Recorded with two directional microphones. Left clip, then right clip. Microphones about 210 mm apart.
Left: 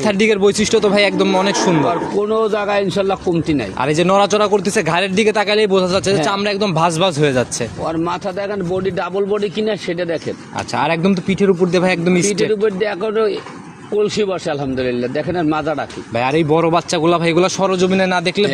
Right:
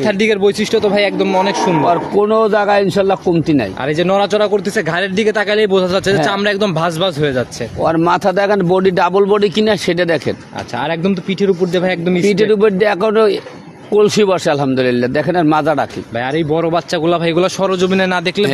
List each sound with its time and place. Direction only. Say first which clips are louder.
0.0 s a man's voice: right 1 dB; centre (ahead or behind)
1.9 s a man's voice: right 4 dB; 45° right (ahead or behind)
3.8 s a man's voice: left 3 dB; centre (ahead or behind)
6.8 s a man's voice: left 1 dB; 5° left (ahead or behind)
7.8 s a man's voice: right 9 dB; 55° right (ahead or behind)
10.8 s a man's voice: left 1 dB; centre (ahead or behind)
12.4 s a man's voice: right 5 dB; 55° right (ahead or behind)
16.2 s a man's voice: left 1 dB; centre (ahead or behind)